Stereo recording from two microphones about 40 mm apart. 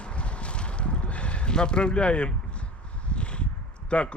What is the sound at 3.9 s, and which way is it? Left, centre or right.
Speech, left.